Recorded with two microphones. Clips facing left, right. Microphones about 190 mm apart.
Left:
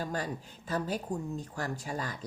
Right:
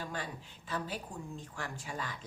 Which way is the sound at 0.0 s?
40° left (ahead or behind).